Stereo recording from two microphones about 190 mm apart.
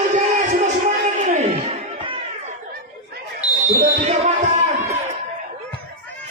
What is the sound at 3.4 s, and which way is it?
Smoke detector, 40° right (ahead or behind).